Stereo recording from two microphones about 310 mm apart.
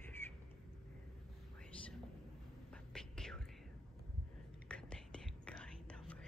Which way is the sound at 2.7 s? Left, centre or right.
Centre.